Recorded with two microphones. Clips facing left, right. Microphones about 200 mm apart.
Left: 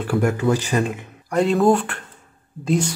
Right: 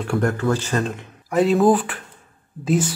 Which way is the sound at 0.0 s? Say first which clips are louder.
Left 1 dB; 5° left (ahead or behind).